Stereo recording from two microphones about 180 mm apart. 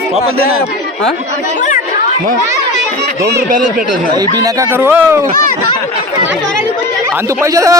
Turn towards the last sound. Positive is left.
turn(degrees=-20)  # may be behind; listen again after turning